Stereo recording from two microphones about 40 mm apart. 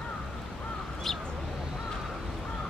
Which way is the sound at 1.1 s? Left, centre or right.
Centre.